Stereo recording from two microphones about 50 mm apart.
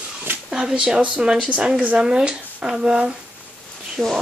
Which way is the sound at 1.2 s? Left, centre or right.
Right.